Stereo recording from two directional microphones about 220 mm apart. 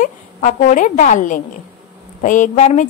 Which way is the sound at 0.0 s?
35° left (ahead or behind).